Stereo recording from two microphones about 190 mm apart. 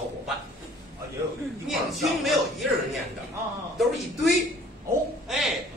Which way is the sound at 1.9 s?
Centre (ahead or behind).